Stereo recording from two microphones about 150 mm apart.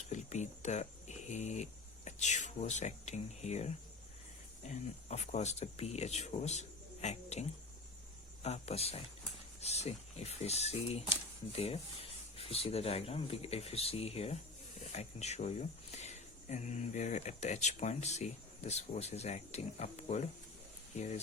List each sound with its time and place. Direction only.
0.1 s speech: 50° left (ahead or behind)
4.7 s speech: 50° left (ahead or behind)